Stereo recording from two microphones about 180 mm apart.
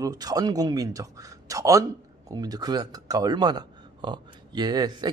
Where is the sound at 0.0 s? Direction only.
20° right (ahead or behind).